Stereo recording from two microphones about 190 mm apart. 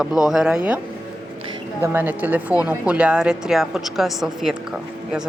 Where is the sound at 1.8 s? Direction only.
10° right (ahead or behind).